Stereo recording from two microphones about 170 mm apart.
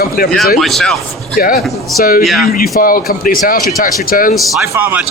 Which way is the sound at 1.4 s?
60° left (ahead or behind).